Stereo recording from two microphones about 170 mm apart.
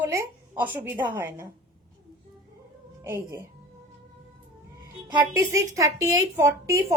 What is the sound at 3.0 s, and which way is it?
Speech, 15° right (ahead or behind).